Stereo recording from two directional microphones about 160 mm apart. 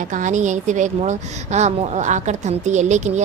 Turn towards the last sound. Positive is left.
turn(degrees=-45)  # may be behind; listen again after turning